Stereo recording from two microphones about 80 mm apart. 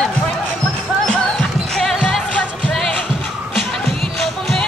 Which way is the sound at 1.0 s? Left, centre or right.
Centre.